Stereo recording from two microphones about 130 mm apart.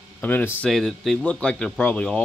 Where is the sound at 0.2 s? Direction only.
15° left (ahead or behind).